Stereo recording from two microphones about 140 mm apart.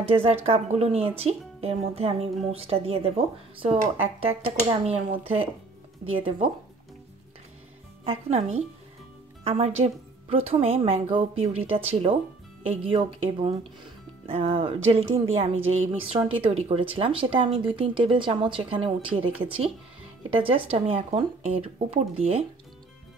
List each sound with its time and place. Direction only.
0.0 s speech: 45° right (ahead or behind)
8.0 s speech: 45° right (ahead or behind)